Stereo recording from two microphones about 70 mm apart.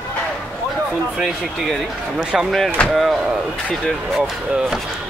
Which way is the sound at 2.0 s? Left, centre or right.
Centre.